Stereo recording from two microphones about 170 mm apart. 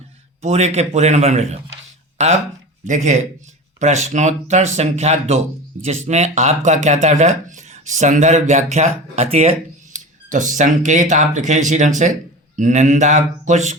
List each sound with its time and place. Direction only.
0.4 s a man's voice: 40° right (ahead or behind)